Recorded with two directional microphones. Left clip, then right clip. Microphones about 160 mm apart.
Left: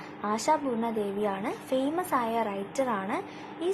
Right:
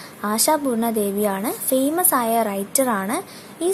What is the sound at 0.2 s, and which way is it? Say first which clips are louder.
A woman's voice: right 7 dB; 35° right (ahead or behind).